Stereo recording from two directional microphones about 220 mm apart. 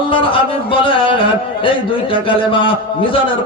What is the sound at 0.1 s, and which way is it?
Music, 25° left (ahead or behind).